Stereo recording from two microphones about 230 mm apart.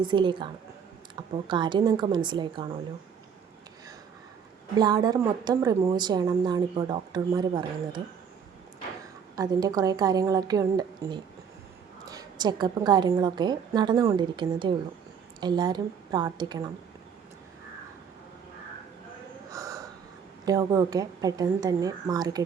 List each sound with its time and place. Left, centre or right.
0.0 s a woman's voice: right
4.8 s a woman's voice: centre
9.3 s a woman's voice: centre
19.5 s gasp: centre
20.4 s a woman's voice: centre